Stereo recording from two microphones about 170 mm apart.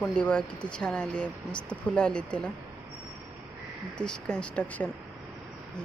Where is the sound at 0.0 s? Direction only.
5° left (ahead or behind).